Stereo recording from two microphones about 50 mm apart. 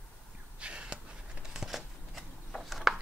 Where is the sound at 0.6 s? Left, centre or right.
Right.